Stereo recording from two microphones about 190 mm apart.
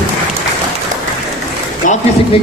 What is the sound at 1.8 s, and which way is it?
Speech, 45° left (ahead or behind).